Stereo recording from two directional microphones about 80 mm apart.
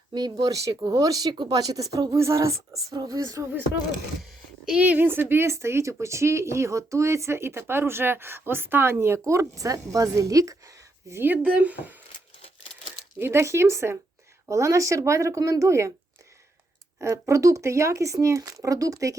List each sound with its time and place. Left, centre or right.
0.1 s speech: right
0.8 s speech: right
2.9 s speech: right
4.2 s speech: centre; by 10.6 s right
11.1 s speech: right
11.4 s speech: centre
13.1 s speech: right
17.0 s speech: right